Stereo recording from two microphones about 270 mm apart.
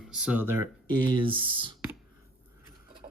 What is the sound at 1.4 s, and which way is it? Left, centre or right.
Speech, centre.